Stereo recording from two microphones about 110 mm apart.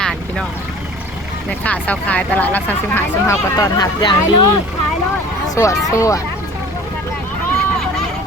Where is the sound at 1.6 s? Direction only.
15° left (ahead or behind).